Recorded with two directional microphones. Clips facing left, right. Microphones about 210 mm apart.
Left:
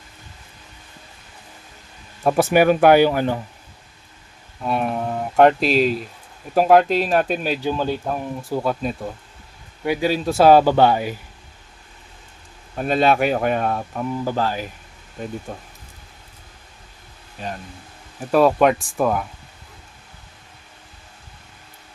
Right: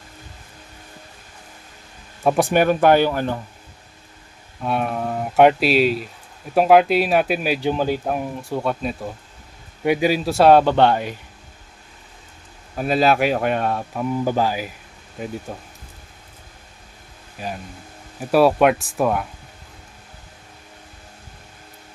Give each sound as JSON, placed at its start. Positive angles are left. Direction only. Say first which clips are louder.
{"t": 2.2, "sound": "speech", "louder": "left 1 dB", "side_deg": 5}
{"t": 4.6, "sound": "speech", "louder": "even", "side_deg": 0}
{"t": 8.4, "sound": "speech", "louder": "left 1 dB", "side_deg": 0}
{"t": 9.8, "sound": "speech", "louder": "right 2 dB", "side_deg": -20}
{"t": 10.2, "sound": "speech", "louder": "left 1 dB", "side_deg": 0}
{"t": 12.7, "sound": "speech", "louder": "even", "side_deg": -5}
{"t": 14.3, "sound": "speech", "louder": "right 2 dB", "side_deg": -15}
{"t": 17.4, "sound": "speech", "louder": "right 1 dB", "side_deg": -5}